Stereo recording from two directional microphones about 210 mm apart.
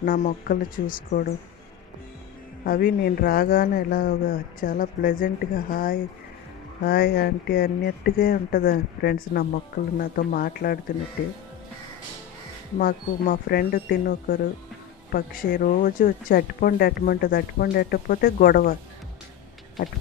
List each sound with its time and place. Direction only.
0.0 s speech: 40° left (ahead or behind)
2.6 s speech: 40° left (ahead or behind)
12.7 s speech: 45° left (ahead or behind)